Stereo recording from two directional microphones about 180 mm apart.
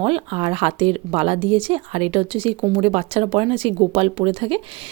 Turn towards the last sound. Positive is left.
turn(degrees=-30)  # may be behind; listen again after turning